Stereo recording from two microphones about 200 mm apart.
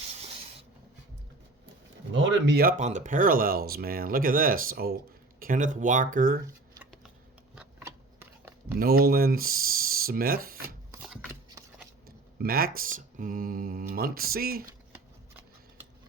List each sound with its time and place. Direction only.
2.1 s speech: 60° right (ahead or behind); by 6.4 s 45° right (ahead or behind)
7.9 s scissors: 10° right (ahead or behind)
8.8 s speech: 50° right (ahead or behind)
11.4 s shuffling cards: 15° right (ahead or behind)
12.0 s speech: 50° right (ahead or behind)